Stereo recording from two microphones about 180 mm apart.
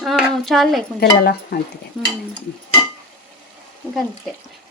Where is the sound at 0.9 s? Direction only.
60° left (ahead or behind).